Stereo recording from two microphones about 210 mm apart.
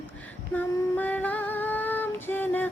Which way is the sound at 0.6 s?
10° left (ahead or behind).